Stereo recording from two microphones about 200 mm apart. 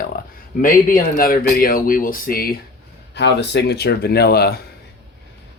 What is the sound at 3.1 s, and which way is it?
Speech, 60° left (ahead or behind).